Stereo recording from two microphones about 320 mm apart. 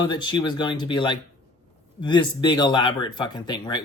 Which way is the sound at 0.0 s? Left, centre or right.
Centre.